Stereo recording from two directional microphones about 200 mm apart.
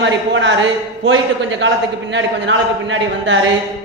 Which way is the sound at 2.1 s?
65° right (ahead or behind).